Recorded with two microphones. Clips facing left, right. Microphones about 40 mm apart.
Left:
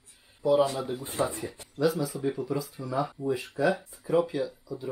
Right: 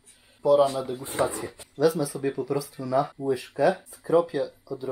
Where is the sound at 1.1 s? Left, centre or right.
Right.